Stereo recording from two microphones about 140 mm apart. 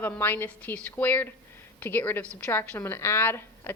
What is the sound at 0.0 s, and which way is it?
Speech, 15° left (ahead or behind).